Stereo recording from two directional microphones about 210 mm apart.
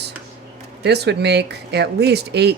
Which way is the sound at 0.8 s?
50° right (ahead or behind).